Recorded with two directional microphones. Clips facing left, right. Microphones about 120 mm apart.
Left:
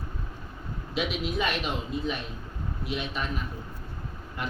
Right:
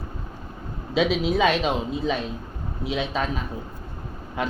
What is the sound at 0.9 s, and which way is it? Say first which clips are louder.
A man's voice: right 8 dB; 90° right.